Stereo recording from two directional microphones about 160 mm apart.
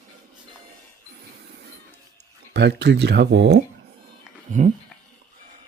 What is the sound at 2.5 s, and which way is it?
Speech, 90° right.